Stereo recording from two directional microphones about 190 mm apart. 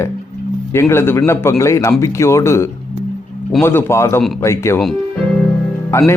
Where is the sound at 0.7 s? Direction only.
15° left (ahead or behind).